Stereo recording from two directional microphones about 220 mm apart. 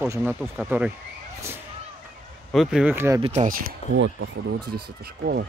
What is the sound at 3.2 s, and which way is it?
Speech, 35° right (ahead or behind).